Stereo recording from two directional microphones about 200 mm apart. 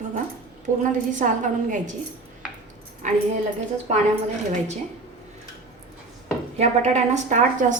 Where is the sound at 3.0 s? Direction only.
40° right (ahead or behind).